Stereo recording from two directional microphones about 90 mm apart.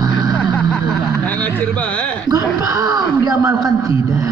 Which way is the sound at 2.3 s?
45° right (ahead or behind).